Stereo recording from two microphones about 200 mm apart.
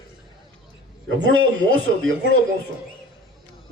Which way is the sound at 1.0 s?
65° right (ahead or behind).